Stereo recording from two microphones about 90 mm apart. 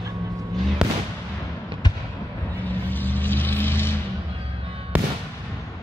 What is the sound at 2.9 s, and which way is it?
Vehicle, 20° left (ahead or behind).